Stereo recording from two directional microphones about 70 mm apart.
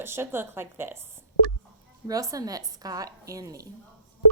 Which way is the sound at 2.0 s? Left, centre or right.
Right.